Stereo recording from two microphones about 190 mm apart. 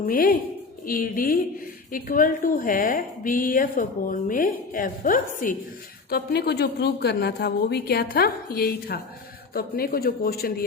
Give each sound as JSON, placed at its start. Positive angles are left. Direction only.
{"t": 0.0, "sound": "a woman's voice", "side_deg": 50}
{"t": 6.1, "sound": "a woman's voice", "side_deg": 55}